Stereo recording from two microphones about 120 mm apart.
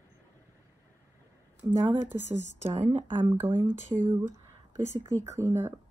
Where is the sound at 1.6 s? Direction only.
30° right (ahead or behind).